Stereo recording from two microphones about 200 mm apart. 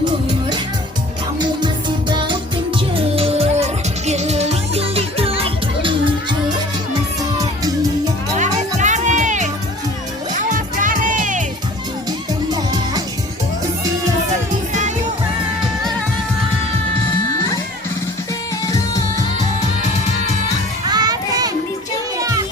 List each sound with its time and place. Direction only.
1.4 s music: 25° right (ahead or behind)
8.4 s music: 35° right (ahead or behind)
12.5 s music: 20° right (ahead or behind)
14.7 s music: 35° right (ahead or behind)
18.6 s music: 15° left (ahead or behind)
20.8 s music: 20° right (ahead or behind)
22.2 s children playing: 15° right (ahead or behind)